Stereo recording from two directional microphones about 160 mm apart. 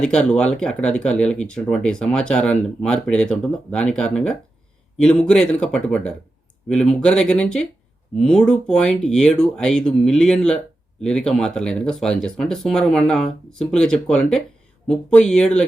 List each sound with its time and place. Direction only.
0.0 s speech: 5° left (ahead or behind)